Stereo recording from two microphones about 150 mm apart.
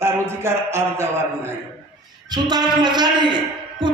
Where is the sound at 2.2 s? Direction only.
30° right (ahead or behind).